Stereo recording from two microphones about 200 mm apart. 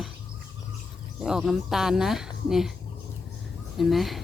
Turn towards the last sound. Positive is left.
turn(degrees=0)  # may be behind; listen again after turning